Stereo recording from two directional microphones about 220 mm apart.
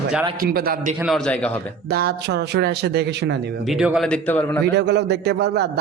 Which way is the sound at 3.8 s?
Centre (ahead or behind).